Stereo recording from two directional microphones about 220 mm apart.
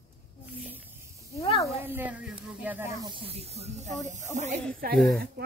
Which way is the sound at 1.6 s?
10° right (ahead or behind).